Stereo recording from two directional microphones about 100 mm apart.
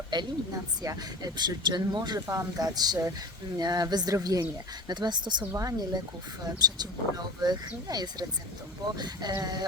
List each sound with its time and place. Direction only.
0.1 s speech: 45° right (ahead or behind)
2.2 s speech: 30° right (ahead or behind); by 5.5 s 50° right (ahead or behind)
5.5 s speech: 35° right (ahead or behind)